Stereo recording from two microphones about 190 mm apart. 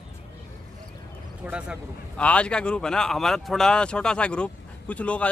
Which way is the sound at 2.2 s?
5° left (ahead or behind).